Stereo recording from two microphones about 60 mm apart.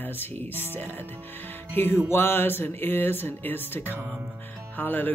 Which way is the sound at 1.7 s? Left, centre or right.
Left.